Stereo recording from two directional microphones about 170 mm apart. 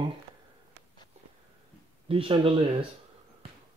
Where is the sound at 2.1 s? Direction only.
30° right (ahead or behind).